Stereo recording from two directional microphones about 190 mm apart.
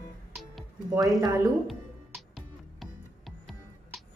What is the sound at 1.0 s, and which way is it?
Speech, 15° right (ahead or behind).